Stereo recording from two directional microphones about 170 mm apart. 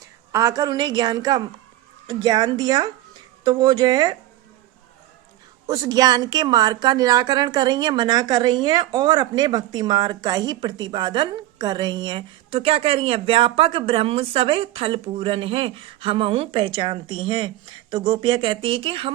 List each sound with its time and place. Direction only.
0.3 s a woman's voice: 20° right (ahead or behind)
5.6 s a woman's voice: 20° right (ahead or behind)